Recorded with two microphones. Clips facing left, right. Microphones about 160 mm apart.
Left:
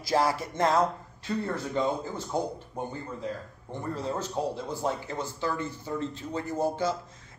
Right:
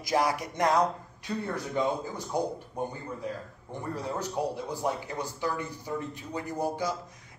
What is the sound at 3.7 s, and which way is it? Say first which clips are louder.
Speech: left 2 dB; 15° right (ahead or behind).